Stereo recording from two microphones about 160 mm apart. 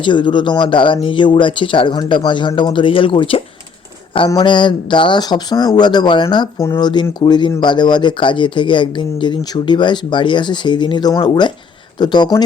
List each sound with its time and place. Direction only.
0.0 s speech: 30° left (ahead or behind)